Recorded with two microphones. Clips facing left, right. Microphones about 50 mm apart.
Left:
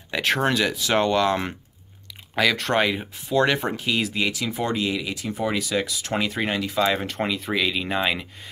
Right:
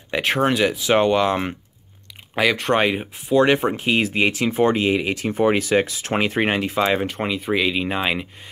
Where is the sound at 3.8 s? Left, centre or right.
Right.